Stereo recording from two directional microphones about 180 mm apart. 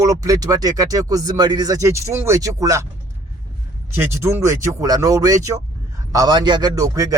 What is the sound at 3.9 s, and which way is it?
Speech, 15° right (ahead or behind).